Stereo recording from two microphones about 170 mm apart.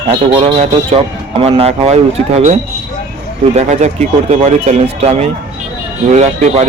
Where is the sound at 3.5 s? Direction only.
45° right (ahead or behind).